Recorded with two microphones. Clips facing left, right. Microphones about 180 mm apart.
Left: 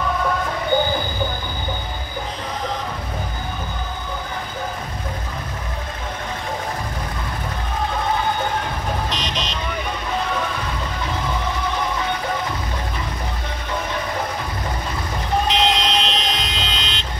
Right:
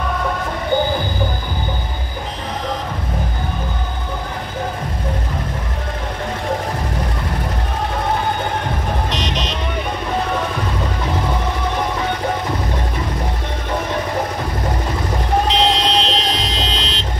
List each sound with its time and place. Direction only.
9.1 s vehicle: 70° right (ahead or behind)
15.4 s vehicle: 35° right (ahead or behind)